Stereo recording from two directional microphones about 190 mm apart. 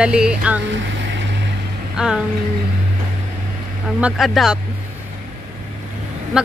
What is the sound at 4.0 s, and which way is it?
Speech, 5° right (ahead or behind).